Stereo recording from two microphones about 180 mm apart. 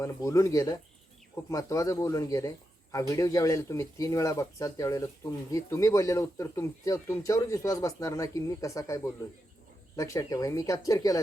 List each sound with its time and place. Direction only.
0.0 s speech: 15° left (ahead or behind)